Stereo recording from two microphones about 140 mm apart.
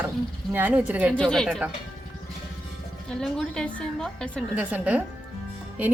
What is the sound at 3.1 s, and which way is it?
A woman's voice, 5° left (ahead or behind).